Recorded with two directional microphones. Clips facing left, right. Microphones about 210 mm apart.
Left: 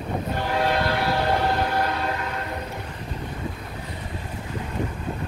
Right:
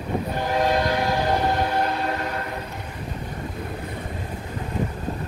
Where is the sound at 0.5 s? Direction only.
15° right (ahead or behind).